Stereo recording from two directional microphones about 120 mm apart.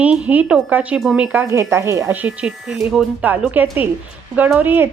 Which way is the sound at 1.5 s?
20° right (ahead or behind).